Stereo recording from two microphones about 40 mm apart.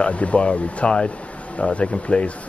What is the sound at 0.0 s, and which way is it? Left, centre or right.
Speech, left.